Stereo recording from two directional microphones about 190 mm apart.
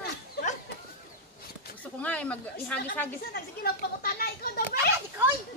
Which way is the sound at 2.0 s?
5° left (ahead or behind).